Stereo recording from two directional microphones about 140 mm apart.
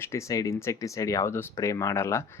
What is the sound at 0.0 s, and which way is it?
Speech, 20° left (ahead or behind).